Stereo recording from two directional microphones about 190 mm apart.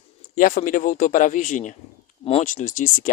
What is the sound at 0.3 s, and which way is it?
Speech, 45° left (ahead or behind).